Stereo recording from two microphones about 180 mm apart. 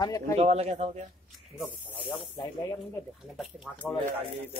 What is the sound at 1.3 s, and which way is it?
Speech, 5° right (ahead or behind).